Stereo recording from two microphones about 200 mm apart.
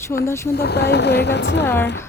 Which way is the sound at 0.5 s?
55° left (ahead or behind).